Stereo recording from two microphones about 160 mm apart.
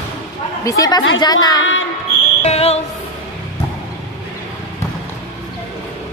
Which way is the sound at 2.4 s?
40° left (ahead or behind).